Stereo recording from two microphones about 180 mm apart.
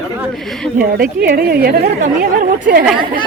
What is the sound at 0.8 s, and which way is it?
A woman's voice, 55° right (ahead or behind).